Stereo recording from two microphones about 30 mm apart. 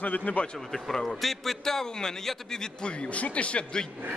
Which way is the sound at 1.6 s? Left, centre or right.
Centre.